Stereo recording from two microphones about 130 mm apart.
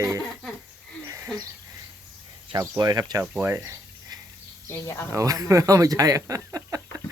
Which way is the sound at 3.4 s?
20° right (ahead or behind).